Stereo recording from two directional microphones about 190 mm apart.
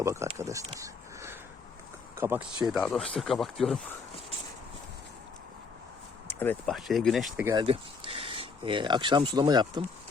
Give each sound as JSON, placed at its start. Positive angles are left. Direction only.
{"t": 0.0, "sound": "speech", "side_deg": -15}
{"t": 6.2, "sound": "speech", "side_deg": 10}
{"t": 6.7, "sound": "speech", "side_deg": 0}
{"t": 7.3, "sound": "speech", "side_deg": -15}
{"t": 7.6, "sound": "speech", "side_deg": -30}